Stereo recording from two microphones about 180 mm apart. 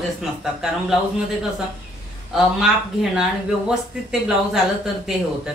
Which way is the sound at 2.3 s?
Centre (ahead or behind).